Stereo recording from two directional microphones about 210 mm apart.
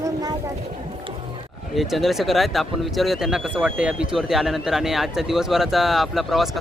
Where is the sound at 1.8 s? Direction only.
Centre (ahead or behind).